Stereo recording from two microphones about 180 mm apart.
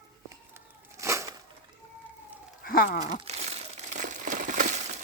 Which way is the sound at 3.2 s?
35° right (ahead or behind).